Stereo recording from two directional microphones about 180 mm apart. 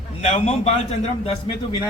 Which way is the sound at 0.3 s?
40° left (ahead or behind).